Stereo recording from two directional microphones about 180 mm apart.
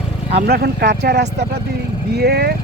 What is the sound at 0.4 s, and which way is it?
Speech, 60° right (ahead or behind).